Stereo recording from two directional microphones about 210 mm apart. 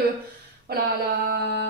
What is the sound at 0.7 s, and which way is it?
Speech, 50° right (ahead or behind).